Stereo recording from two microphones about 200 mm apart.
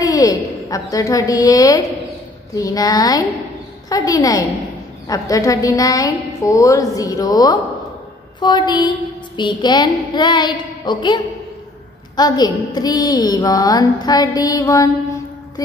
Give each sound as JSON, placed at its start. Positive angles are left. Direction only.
{"t": 0.0, "sound": "a woman's voice", "side_deg": 15}